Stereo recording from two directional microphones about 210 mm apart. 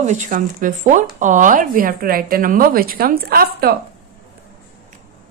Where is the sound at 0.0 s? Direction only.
35° right (ahead or behind).